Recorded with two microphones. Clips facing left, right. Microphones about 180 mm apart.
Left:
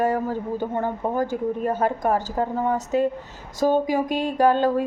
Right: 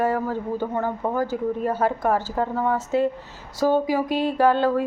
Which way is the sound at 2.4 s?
25° left (ahead or behind).